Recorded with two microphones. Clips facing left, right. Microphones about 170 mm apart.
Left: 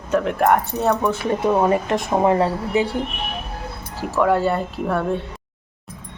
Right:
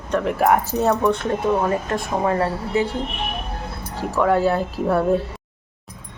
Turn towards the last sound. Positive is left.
turn(degrees=-5)  # may be behind; listen again after turning